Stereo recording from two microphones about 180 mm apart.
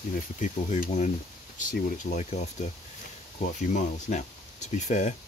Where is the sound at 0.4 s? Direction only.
45° left (ahead or behind).